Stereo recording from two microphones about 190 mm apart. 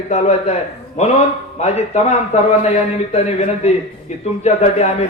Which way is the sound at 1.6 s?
35° left (ahead or behind).